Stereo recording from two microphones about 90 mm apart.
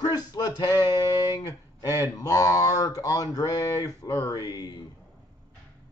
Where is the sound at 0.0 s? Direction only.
50° left (ahead or behind).